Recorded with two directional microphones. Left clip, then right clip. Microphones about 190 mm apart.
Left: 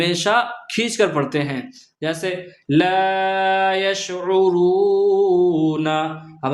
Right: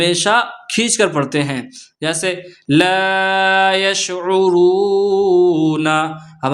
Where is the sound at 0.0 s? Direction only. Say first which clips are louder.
Right 4 dB; 30° right (ahead or behind).